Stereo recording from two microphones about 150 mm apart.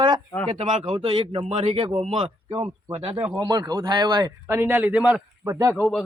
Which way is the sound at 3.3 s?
25° right (ahead or behind).